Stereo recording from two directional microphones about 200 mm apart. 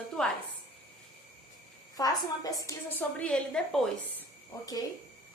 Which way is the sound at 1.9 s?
20° left (ahead or behind).